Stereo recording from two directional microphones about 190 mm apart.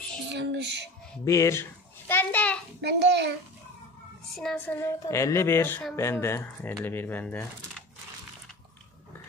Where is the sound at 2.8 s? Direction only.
60° right (ahead or behind).